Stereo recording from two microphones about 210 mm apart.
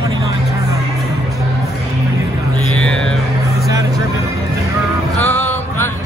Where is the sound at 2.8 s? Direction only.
5° left (ahead or behind).